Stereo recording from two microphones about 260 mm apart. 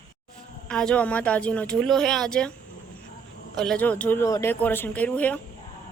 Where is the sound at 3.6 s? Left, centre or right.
Centre.